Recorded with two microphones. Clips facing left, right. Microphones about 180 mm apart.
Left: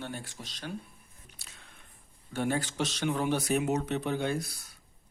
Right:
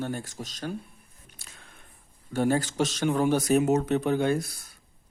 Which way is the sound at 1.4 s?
50° right (ahead or behind).